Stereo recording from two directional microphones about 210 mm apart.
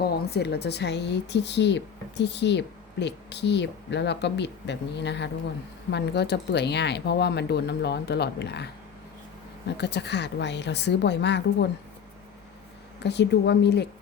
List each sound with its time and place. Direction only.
0.3 s speech: 50° left (ahead or behind)
9.7 s speech: 55° left (ahead or behind)
13.0 s speech: 55° left (ahead or behind)